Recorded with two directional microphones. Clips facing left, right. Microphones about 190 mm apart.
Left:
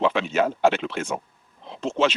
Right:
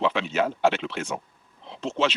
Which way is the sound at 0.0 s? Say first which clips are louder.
Left 3 dB; 50° left (ahead or behind).